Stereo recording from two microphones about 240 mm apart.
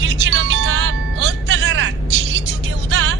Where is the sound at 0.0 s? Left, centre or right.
Right.